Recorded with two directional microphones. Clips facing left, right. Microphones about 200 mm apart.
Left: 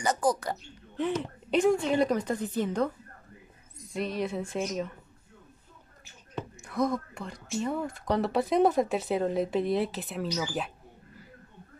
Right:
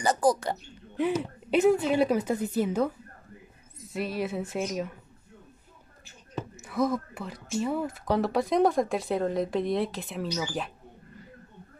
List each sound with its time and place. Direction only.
0.0 s speech: 35° right (ahead or behind)
0.9 s a woman's voice: 10° right (ahead or behind)
3.9 s speech: 5° right (ahead or behind)
6.3 s speech: 5° right (ahead or behind)